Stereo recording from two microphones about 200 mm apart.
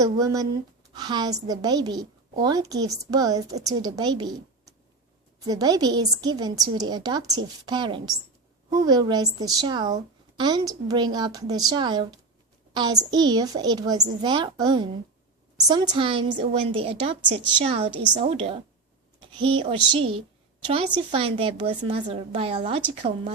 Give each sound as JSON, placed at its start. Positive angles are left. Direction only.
{"t": 0.0, "sound": "a woman's voice", "side_deg": -15}